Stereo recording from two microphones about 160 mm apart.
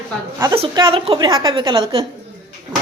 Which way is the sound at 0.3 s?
15° right (ahead or behind).